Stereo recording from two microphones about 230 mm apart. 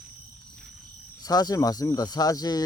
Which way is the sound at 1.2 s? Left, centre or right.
Centre.